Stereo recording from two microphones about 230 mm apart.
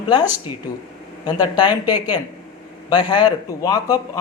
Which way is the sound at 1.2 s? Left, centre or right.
Centre.